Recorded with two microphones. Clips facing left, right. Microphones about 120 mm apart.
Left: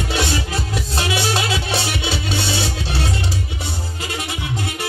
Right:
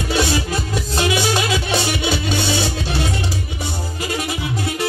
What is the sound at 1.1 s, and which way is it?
Music, 30° left (ahead or behind).